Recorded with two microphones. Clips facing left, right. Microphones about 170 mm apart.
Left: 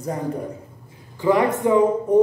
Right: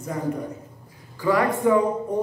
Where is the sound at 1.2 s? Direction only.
20° left (ahead or behind).